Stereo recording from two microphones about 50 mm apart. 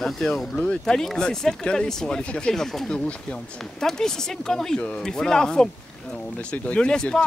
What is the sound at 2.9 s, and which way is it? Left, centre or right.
Speech, left.